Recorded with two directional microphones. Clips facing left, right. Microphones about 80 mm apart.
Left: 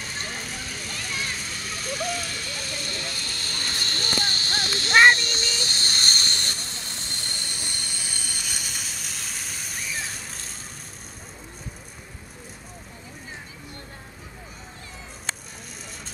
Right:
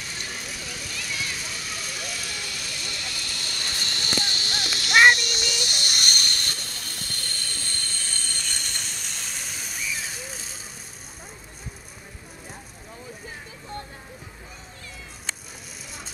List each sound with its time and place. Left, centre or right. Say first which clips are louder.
0.2 s vehicle: left 2 dB; left; by 10.5 s centre